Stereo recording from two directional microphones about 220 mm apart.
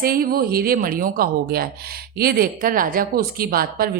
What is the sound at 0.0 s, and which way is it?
A woman's voice, 40° right (ahead or behind).